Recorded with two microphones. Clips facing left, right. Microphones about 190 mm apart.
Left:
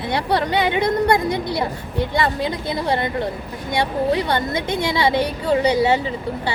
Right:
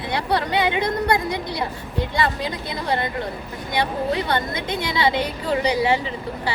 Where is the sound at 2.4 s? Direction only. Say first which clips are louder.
Left 4 dB; 25° left (ahead or behind).